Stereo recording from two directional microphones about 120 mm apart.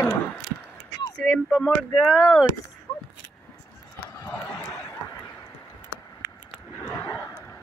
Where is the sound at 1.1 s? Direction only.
5° left (ahead or behind).